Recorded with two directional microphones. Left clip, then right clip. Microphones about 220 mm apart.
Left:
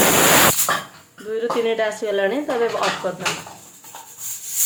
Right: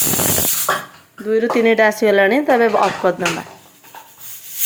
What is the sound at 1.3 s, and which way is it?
Speech, 30° right (ahead or behind).